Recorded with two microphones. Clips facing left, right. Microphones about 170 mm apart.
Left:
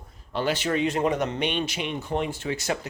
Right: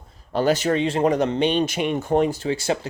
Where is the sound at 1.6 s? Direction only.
45° right (ahead or behind); by 2.9 s 30° right (ahead or behind).